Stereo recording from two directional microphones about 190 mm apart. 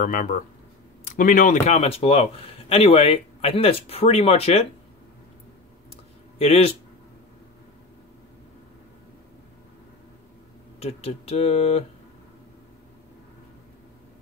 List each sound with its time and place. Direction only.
0.0 s speech: 45° left (ahead or behind)
6.3 s speech: 30° left (ahead or behind)
10.8 s speech: 35° left (ahead or behind)